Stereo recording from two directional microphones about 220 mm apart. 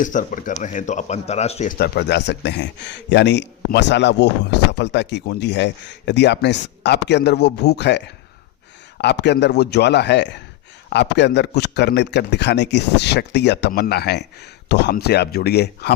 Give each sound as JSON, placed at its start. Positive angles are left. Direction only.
{"t": 0.0, "sound": "speech", "side_deg": 35}
{"t": 1.8, "sound": "a man's voice", "side_deg": 50}